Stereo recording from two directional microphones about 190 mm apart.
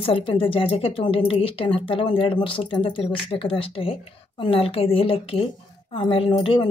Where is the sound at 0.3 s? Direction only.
30° left (ahead or behind).